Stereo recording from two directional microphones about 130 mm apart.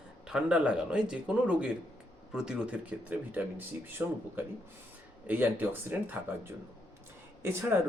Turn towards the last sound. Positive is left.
turn(degrees=-15)  # may be behind; listen again after turning